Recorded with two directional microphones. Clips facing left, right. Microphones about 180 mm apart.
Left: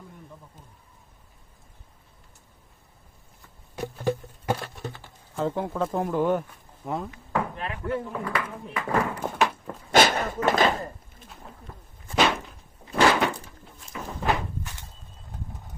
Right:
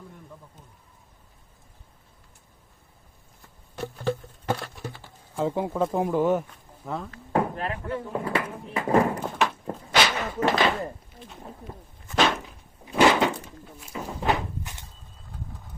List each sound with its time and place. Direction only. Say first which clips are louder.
3.8 s patter: left 1 dB; 15° left (ahead or behind)
4.8 s music: left 1 dB; 20° left (ahead or behind)
5.4 s speech: right 2 dB; 5° right (ahead or behind)
6.8 s speech: left 2 dB; 15° left (ahead or behind)
7.3 s speech: right 4 dB; 40° right (ahead or behind)
9.2 s a sound: left 1 dB; centre (ahead or behind)
9.9 s a sound: left 4 dB; 50° left (ahead or behind)
12.1 s a sound: even; 5° left (ahead or behind)
13.1 s door: right 1 dB; 20° right (ahead or behind)
14.1 s walk: right 1 dB; centre (ahead or behind)